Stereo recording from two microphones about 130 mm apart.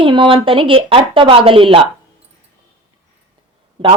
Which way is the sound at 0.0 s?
40° right (ahead or behind).